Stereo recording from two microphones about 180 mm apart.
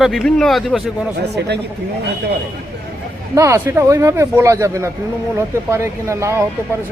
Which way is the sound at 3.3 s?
15° right (ahead or behind).